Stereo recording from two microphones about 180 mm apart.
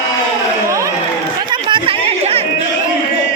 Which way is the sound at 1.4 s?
25° right (ahead or behind).